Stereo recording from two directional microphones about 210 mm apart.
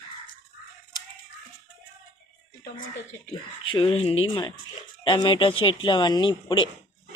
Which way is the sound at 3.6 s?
25° left (ahead or behind).